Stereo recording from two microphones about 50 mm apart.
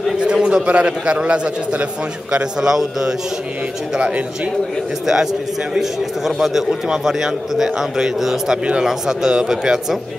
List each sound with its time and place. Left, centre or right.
0.2 s a man's voice: centre
2.3 s a man's voice: centre
5.0 s a man's voice: centre